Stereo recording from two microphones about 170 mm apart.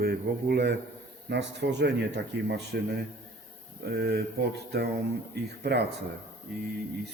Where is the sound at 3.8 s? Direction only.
70° right (ahead or behind).